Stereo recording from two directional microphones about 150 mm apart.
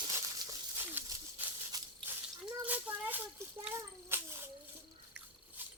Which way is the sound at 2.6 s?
10° right (ahead or behind).